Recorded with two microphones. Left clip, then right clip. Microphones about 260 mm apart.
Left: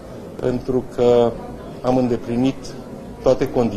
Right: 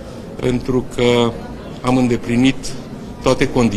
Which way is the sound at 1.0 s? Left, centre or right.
Right.